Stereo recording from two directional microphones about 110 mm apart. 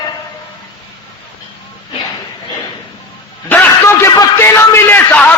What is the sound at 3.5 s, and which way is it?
A man's voice, 20° left (ahead or behind).